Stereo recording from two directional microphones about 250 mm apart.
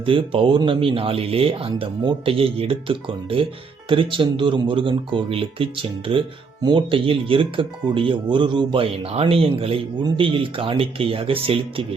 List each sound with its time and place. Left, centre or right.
0.0 s speech: right